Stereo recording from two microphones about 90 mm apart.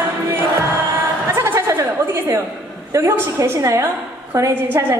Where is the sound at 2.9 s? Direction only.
35° right (ahead or behind).